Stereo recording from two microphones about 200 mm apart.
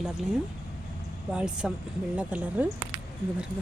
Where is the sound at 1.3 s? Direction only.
5° right (ahead or behind).